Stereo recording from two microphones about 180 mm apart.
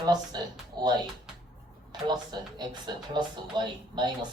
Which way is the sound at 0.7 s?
25° right (ahead or behind).